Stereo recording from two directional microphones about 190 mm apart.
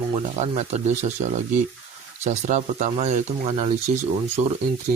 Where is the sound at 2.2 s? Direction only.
35° right (ahead or behind).